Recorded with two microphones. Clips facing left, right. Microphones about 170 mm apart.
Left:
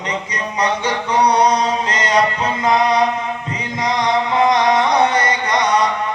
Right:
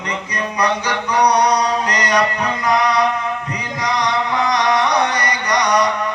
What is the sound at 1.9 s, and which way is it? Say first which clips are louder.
Music: left 1 dB; 25° left (ahead or behind).